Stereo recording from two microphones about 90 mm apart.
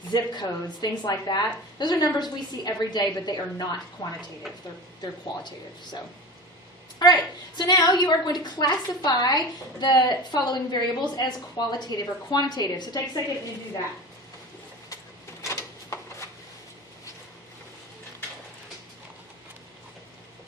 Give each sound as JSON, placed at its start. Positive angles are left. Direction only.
{"t": 0.1, "sound": "a woman's voice", "side_deg": 50}
{"t": 5.4, "sound": "a woman's voice", "side_deg": 55}
{"t": 7.0, "sound": "a woman's voice", "side_deg": 50}
{"t": 15.4, "sound": "a sound", "side_deg": 35}